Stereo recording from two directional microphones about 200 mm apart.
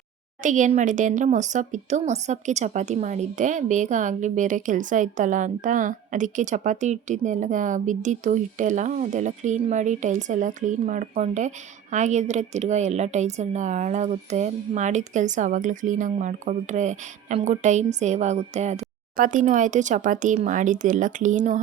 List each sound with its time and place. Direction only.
0.4 s speech: 40° right (ahead or behind)